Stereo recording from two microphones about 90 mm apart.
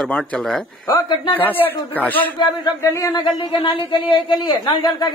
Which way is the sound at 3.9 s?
70° left (ahead or behind).